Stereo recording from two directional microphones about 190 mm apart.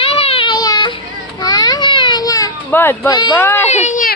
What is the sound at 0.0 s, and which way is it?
Baby cry, 30° left (ahead or behind).